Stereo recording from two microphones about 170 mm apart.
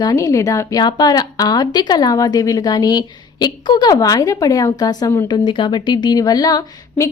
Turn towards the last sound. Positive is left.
turn(degrees=25)  # may be behind; listen again after turning